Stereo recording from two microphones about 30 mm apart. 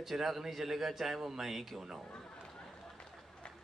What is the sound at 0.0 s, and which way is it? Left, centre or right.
A man's voice, centre.